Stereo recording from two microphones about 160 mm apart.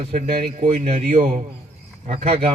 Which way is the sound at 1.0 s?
55° right (ahead or behind).